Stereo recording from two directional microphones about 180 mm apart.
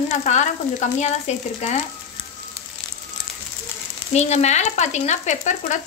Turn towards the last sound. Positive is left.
turn(degrees=40)  # may be behind; listen again after turning